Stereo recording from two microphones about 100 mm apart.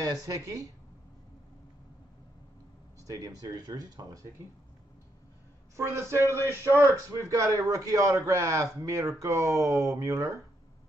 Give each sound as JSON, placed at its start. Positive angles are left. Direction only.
{"t": 0.0, "sound": "a man's voice", "side_deg": -40}
{"t": 3.0, "sound": "a man's voice", "side_deg": -35}
{"t": 5.8, "sound": "speech", "side_deg": -25}
{"t": 6.3, "sound": "speech", "side_deg": 25}
{"t": 7.1, "sound": "a man's voice", "side_deg": -35}